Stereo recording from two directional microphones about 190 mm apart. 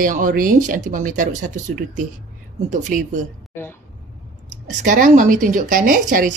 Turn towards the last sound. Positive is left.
turn(degrees=-45)  # may be behind; listen again after turning